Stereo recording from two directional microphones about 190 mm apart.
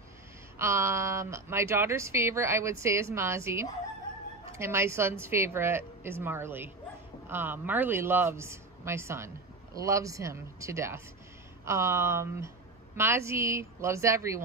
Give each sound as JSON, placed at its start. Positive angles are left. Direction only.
{"t": 0.6, "sound": "speech", "side_deg": -15}